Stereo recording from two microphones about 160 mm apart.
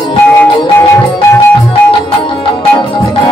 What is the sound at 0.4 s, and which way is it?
Music, 10° left (ahead or behind).